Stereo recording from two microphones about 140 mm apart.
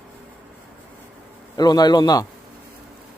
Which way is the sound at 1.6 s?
30° left (ahead or behind).